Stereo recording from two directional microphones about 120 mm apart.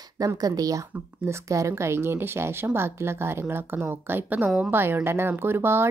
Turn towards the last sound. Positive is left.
turn(degrees=-20)  # may be behind; listen again after turning